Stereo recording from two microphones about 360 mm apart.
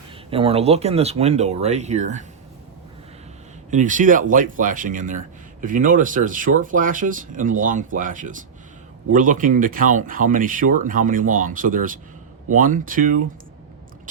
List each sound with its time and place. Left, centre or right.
0.3 s speech: centre
3.7 s speech: right